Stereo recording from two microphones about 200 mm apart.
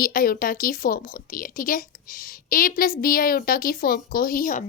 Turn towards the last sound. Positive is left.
turn(degrees=45)  # may be behind; listen again after turning